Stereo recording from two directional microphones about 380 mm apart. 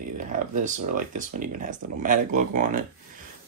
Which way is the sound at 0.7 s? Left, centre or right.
Centre.